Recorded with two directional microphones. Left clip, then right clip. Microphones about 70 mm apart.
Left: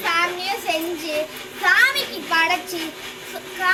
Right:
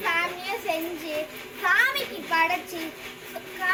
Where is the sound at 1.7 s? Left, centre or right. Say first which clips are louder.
Left 6 dB; centre.